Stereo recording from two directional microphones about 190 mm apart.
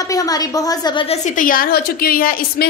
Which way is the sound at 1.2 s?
45° left (ahead or behind).